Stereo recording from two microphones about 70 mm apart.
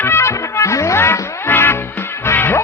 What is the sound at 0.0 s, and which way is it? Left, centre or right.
Music, left.